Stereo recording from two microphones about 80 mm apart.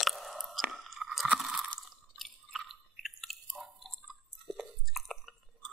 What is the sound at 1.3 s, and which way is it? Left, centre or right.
Squish, centre.